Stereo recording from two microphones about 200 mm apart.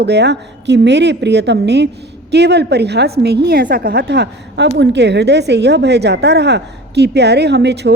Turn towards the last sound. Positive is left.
turn(degrees=-55)  # may be behind; listen again after turning